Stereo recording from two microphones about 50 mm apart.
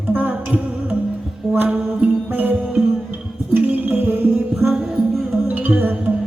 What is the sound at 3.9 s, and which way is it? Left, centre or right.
Music, right.